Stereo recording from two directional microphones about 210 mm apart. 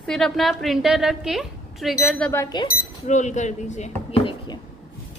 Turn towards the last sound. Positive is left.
turn(degrees=20)  # may be behind; listen again after turning